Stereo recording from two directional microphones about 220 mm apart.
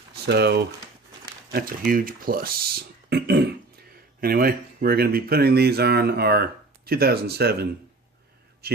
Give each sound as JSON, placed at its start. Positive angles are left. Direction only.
{"t": 0.1, "sound": "a man's voice", "side_deg": -50}